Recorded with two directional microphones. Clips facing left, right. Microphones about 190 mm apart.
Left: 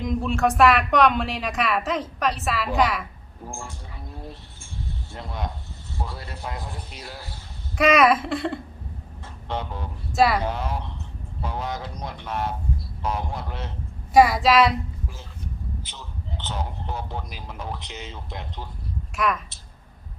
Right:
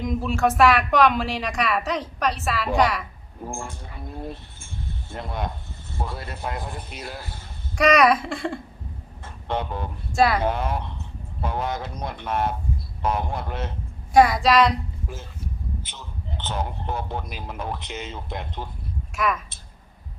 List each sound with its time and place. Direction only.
0.0 s a woman's voice: centre (ahead or behind)
3.5 s a sound: 55° right (ahead or behind)
5.1 s speech: 55° right (ahead or behind)
7.8 s a woman's voice: centre (ahead or behind)
9.2 s vehicle: 55° right (ahead or behind)
10.1 s speech: centre (ahead or behind)
10.4 s speech: 55° right (ahead or behind)
14.1 s a woman's voice: centre (ahead or behind)
16.3 s speech: 55° right (ahead or behind)
19.1 s a woman's voice: centre (ahead or behind)